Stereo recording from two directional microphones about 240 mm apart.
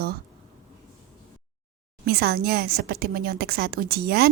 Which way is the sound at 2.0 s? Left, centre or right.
Right.